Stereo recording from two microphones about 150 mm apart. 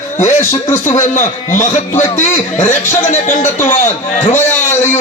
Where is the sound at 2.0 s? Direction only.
50° left (ahead or behind).